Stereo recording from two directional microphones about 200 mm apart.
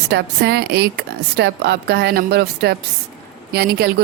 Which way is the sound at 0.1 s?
55° right (ahead or behind).